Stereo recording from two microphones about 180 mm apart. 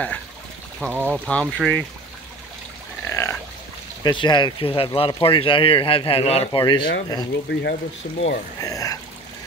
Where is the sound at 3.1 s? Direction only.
15° left (ahead or behind).